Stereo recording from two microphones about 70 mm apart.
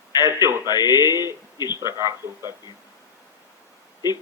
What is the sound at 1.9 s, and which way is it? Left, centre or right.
Speech, right.